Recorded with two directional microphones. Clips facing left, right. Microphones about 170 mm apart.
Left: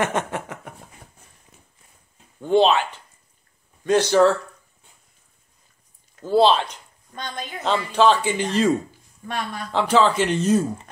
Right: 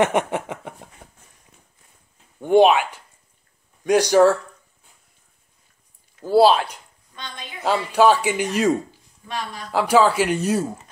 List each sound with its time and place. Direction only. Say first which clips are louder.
0.0 s a sound: right 4 dB; 20° right (ahead or behind)
2.4 s speech: right 3 dB; 15° right (ahead or behind)
6.2 s speech: right 2 dB; 10° right (ahead or behind)
7.2 s a woman's voice: left 5 dB; 45° left (ahead or behind)
7.6 s speech: right 2 dB; 10° right (ahead or behind)
9.3 s speech: left 2 dB; 55° left (ahead or behind)
9.7 s speech: right 2 dB; 10° right (ahead or behind)